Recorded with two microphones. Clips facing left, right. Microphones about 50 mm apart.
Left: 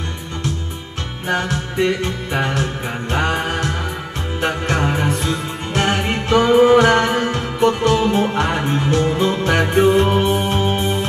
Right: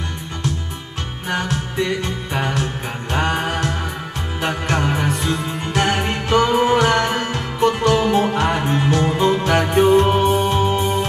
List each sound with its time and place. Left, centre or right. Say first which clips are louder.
1.3 s music: left 2 dB; left